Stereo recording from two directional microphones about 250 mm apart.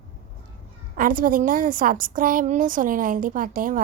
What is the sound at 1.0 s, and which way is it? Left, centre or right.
A woman's voice, right.